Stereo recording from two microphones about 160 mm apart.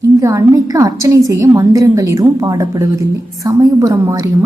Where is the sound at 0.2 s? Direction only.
20° right (ahead or behind).